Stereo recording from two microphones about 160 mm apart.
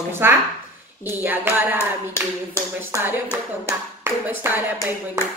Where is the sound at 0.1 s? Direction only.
15° right (ahead or behind).